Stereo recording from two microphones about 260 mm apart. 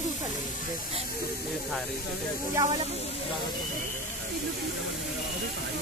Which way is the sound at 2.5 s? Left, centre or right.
Centre.